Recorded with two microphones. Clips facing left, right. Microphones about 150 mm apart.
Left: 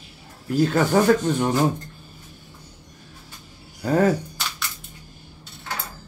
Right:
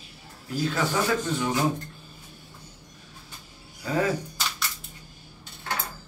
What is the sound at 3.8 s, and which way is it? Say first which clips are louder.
Speech: left 7 dB; 50° left (ahead or behind).